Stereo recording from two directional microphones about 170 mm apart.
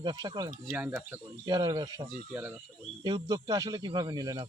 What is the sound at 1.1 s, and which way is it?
Speech, 15° right (ahead or behind).